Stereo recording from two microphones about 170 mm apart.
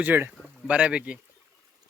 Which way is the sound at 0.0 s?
10° right (ahead or behind).